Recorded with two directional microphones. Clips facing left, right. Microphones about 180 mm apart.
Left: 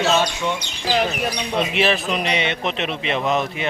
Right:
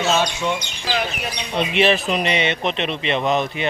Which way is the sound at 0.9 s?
40° left (ahead or behind).